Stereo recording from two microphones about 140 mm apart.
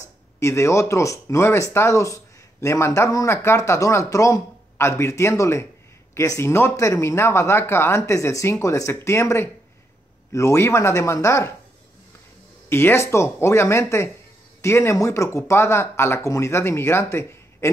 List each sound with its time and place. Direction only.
0.0 s speech: 20° left (ahead or behind)
12.6 s speech: 15° left (ahead or behind)